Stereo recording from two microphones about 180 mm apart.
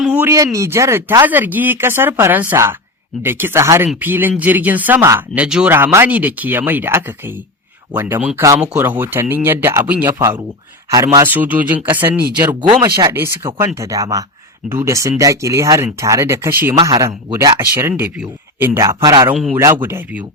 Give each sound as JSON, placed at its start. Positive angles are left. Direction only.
{"t": 0.0, "sound": "speech", "side_deg": -10}
{"t": 12.6, "sound": "speech", "side_deg": -20}